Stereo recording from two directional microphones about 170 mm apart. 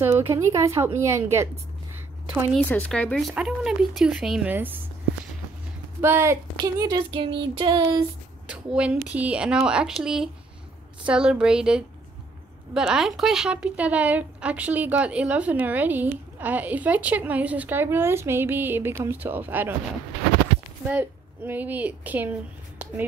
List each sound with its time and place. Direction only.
0.0 s speech: 15° right (ahead or behind)
2.5 s speech: 5° left (ahead or behind); by 4.8 s 10° right (ahead or behind)
5.9 s speech: 15° right (ahead or behind)
8.5 s a woman's voice: 5° right (ahead or behind)
20.9 s speech: 10° right (ahead or behind)